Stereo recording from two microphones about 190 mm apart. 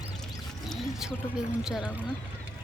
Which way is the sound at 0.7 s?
Centre (ahead or behind).